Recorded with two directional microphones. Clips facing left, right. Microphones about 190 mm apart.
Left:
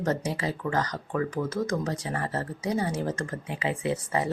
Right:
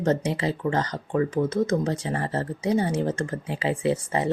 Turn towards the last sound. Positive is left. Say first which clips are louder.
# right 4 dB
turn(degrees=-30)  # may be behind; listen again after turning